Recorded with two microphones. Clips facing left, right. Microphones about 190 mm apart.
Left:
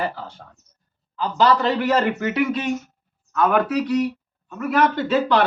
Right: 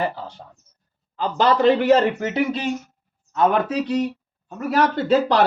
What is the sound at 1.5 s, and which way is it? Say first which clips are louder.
A man's voice: right 5 dB; 25° right (ahead or behind).